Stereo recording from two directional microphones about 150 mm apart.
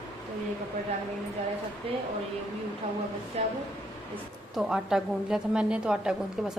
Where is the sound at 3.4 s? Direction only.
40° right (ahead or behind).